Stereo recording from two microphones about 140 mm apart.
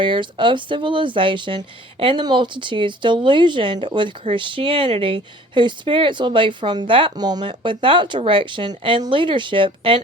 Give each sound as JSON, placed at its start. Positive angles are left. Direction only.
{"t": 0.0, "sound": "speech", "side_deg": -35}